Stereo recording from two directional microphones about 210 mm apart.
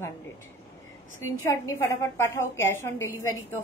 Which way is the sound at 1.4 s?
15° left (ahead or behind).